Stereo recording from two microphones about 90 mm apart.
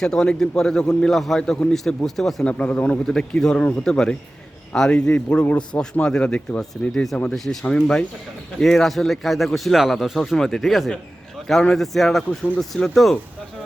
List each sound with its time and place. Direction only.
0.0 s a man's voice: 10° left (ahead or behind)
2.5 s a man's voice: 15° left (ahead or behind)